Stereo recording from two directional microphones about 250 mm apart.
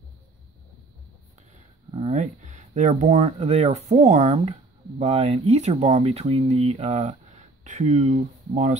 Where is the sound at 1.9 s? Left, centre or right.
Right.